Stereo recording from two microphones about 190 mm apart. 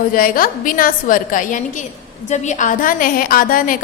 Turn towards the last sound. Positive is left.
turn(degrees=50)  # may be behind; listen again after turning